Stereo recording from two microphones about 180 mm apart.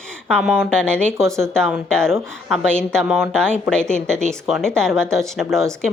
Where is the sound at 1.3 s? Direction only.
15° right (ahead or behind).